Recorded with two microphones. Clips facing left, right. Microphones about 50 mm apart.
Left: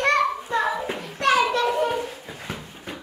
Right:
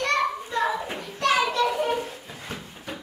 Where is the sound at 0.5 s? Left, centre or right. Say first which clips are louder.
Left 1 dB; left.